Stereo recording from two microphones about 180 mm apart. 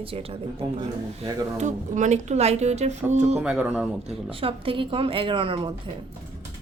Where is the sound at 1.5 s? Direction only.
40° right (ahead or behind).